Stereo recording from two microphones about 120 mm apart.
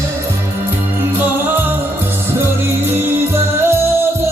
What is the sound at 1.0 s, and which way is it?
Music, 15° right (ahead or behind).